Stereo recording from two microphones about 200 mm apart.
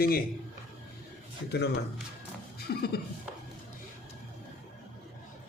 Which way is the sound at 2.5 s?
50° left (ahead or behind).